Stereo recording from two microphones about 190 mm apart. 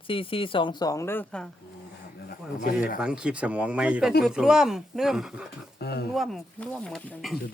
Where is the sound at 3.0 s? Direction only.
5° right (ahead or behind).